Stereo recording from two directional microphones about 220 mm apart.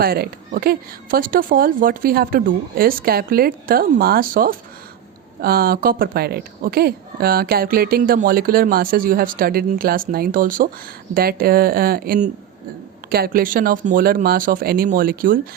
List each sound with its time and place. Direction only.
0.0 s speech: 45° right (ahead or behind)